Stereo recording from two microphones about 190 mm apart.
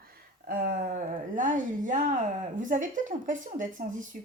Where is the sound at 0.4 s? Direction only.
50° right (ahead or behind).